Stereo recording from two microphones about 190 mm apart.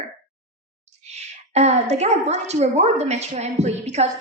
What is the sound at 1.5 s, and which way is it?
A woman's voice, 35° right (ahead or behind).